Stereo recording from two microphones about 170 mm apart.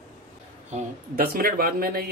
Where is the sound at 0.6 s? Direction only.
50° right (ahead or behind).